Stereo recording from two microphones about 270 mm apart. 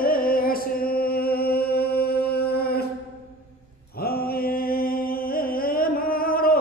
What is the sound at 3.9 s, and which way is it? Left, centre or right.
Mantra, left.